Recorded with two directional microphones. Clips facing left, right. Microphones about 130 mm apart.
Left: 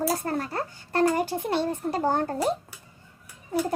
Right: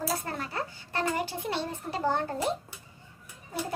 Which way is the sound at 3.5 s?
50° left (ahead or behind).